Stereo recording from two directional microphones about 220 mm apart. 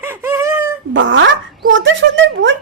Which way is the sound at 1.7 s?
60° right (ahead or behind).